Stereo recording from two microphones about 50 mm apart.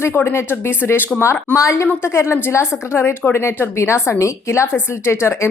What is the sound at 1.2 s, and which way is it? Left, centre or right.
Speech, left.